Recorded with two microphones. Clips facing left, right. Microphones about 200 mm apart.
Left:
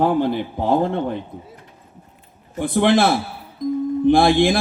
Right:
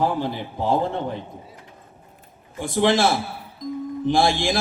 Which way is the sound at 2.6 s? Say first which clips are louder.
Left 3 dB; 55° left (ahead or behind).